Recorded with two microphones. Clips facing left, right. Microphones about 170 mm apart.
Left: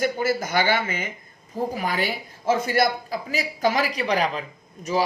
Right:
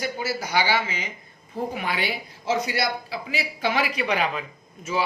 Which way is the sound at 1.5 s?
40° left (ahead or behind).